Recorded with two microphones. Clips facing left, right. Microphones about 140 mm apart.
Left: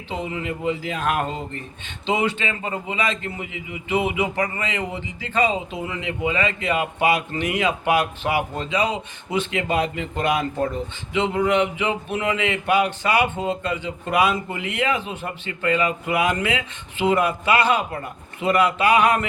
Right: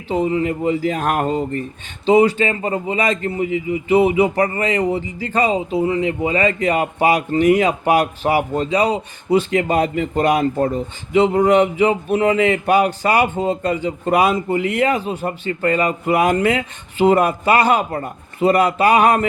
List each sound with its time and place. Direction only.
0.1 s a man's voice: 40° right (ahead or behind)